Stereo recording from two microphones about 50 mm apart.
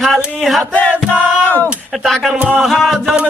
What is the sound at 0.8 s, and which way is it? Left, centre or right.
Music, left.